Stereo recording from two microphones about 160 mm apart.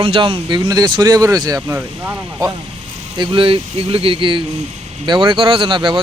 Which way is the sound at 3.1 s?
30° right (ahead or behind).